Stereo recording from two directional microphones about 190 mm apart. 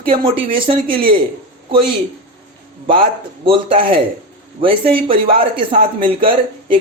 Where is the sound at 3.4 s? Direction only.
30° right (ahead or behind).